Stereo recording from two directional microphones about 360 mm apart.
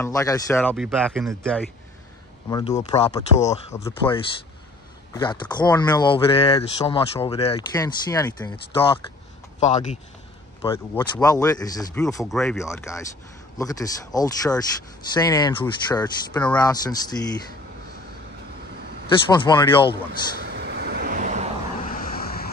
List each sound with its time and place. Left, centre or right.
0.0 s speech: centre
2.5 s speech: centre
10.6 s speech: centre
19.2 s speech: centre
20.3 s vehicle: right
21.8 s vehicle: left